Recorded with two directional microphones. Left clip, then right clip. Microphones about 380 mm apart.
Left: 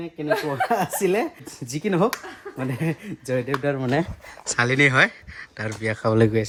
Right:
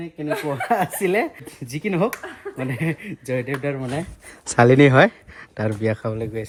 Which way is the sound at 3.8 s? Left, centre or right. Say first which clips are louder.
Left 5 dB; left.